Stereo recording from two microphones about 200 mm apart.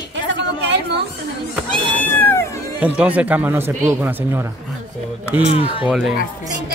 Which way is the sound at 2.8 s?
5° right (ahead or behind).